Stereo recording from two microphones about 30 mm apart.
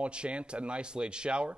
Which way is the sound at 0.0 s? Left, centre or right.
Right.